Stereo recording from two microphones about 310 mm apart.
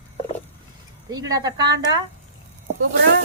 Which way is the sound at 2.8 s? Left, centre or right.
Right.